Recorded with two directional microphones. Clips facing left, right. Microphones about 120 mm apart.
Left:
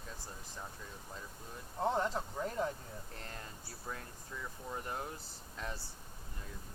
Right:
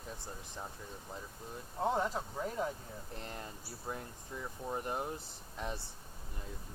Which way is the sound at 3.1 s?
20° right (ahead or behind).